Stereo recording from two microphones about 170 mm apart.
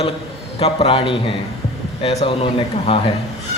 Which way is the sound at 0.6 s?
35° left (ahead or behind).